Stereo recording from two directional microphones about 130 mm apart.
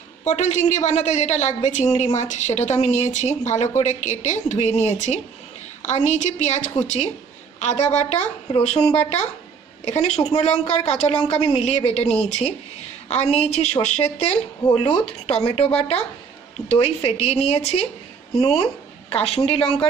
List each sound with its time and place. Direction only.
0.3 s speech: 65° left (ahead or behind)
9.8 s speech: 55° left (ahead or behind)